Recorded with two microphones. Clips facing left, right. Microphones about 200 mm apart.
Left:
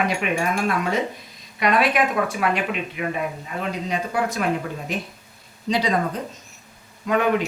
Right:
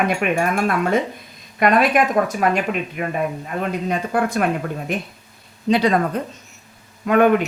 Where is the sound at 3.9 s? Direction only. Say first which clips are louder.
Right 3 dB; 55° right (ahead or behind).